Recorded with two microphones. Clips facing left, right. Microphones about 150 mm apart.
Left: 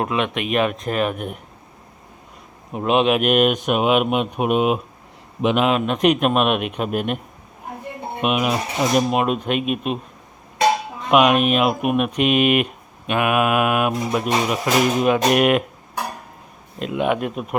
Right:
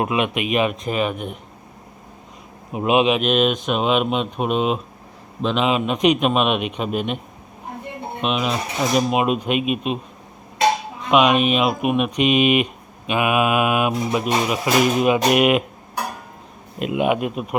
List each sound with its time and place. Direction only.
0.0 s speech: 10° right (ahead or behind)
2.7 s speech: 5° right (ahead or behind)
3.1 s a man's voice: 10° left (ahead or behind)
5.6 s speech: centre (ahead or behind)
8.2 s speech: 10° left (ahead or behind)
11.1 s speech: 5° left (ahead or behind)
16.8 s speech: 10° right (ahead or behind)